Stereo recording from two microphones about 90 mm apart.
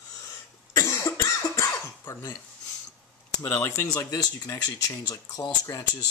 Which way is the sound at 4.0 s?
45° left (ahead or behind).